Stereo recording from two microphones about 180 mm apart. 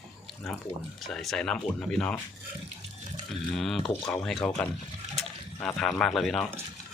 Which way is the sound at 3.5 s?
Centre (ahead or behind).